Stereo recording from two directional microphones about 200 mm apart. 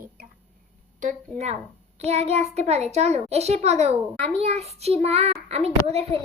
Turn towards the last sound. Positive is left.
turn(degrees=-30)  # may be behind; listen again after turning